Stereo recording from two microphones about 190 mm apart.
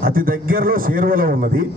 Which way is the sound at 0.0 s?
50° right (ahead or behind).